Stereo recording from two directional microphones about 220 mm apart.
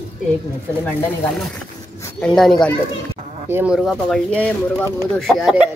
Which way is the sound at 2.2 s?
5° left (ahead or behind).